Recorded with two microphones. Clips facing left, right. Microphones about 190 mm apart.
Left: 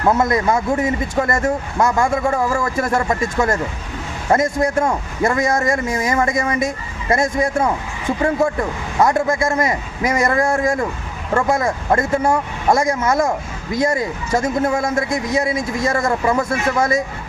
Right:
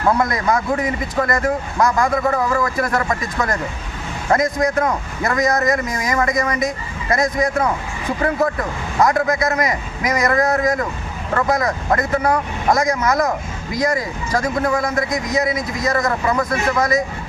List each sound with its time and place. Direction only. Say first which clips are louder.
0.1 s a man's voice: left 2 dB; 25° left (ahead or behind)
9.0 s a man's voice: even; 25° left (ahead or behind)